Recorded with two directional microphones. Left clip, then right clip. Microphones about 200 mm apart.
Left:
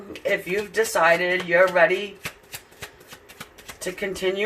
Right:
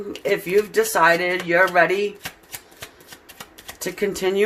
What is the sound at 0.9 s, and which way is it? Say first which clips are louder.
Speech: right 1 dB; 55° right (ahead or behind).